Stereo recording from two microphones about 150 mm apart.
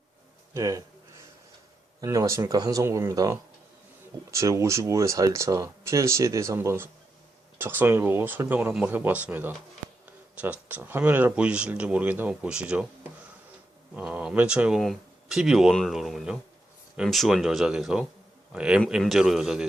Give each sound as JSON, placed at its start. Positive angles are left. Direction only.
{"t": 0.5, "sound": "speech", "side_deg": -20}
{"t": 2.0, "sound": "speech", "side_deg": -20}
{"t": 13.9, "sound": "speech", "side_deg": -10}